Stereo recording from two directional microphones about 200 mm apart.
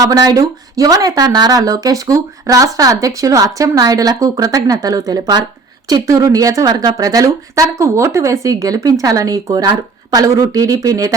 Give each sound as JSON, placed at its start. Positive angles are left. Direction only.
{"t": 0.0, "sound": "a woman's voice", "side_deg": -20}